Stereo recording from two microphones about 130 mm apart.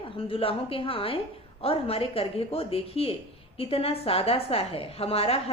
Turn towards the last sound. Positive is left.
turn(degrees=50)  # may be behind; listen again after turning